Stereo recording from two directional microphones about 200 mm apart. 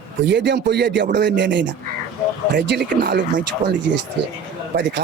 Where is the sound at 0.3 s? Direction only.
60° right (ahead or behind).